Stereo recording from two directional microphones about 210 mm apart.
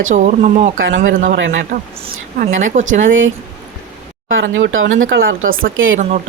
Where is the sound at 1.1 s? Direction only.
45° right (ahead or behind).